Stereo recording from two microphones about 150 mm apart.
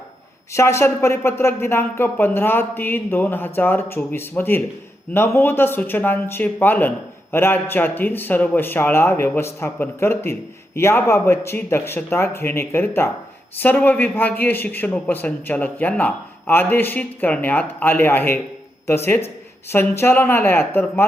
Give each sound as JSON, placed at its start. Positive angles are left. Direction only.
{"t": 0.5, "sound": "a man's voice", "side_deg": 20}